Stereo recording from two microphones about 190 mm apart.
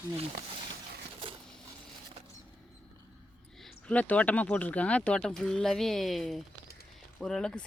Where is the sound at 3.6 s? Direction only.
5° left (ahead or behind).